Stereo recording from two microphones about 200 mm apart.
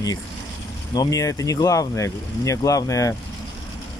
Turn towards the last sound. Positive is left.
turn(degrees=15)  # may be behind; listen again after turning